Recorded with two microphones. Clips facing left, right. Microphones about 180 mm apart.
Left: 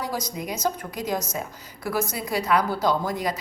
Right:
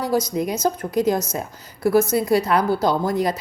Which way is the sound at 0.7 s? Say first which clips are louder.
Right 7 dB; 35° right (ahead or behind).